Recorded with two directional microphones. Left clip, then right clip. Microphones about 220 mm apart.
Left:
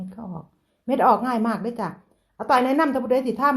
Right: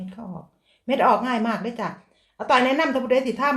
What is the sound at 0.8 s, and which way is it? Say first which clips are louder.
Speech: even; 30° left (ahead or behind).